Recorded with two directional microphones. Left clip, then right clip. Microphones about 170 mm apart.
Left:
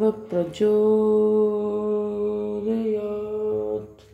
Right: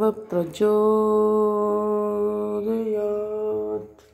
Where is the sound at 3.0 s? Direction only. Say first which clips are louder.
Right 2 dB; 40° right (ahead or behind).